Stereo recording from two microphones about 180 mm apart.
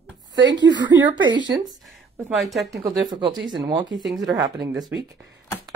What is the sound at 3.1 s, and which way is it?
Speech, 25° right (ahead or behind).